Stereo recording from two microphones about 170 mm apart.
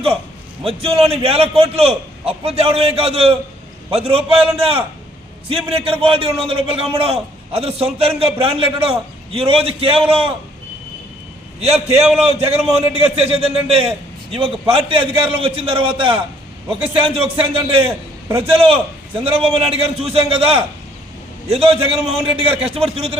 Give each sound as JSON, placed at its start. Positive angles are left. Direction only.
{"t": 0.6, "sound": "a man's voice", "side_deg": -35}
{"t": 11.6, "sound": "a man's voice", "side_deg": -35}